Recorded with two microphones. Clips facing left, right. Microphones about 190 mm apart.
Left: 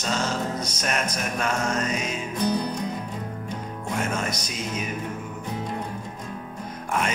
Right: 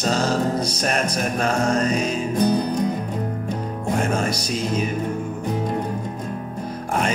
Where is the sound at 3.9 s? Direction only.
35° right (ahead or behind).